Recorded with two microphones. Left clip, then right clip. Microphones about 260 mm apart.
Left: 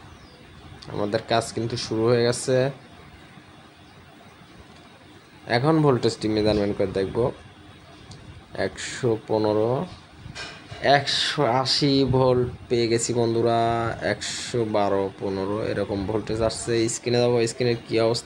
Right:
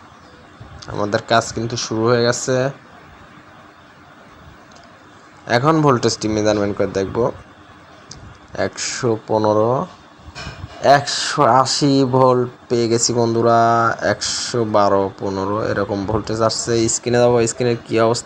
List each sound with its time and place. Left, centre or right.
0.8 s speech: centre
5.5 s speech: centre
8.5 s speech: centre
10.8 s speech: centre
16.5 s speech: centre
16.7 s speech: centre